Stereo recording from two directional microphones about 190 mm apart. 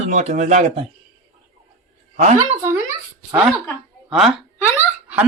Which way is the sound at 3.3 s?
10° right (ahead or behind).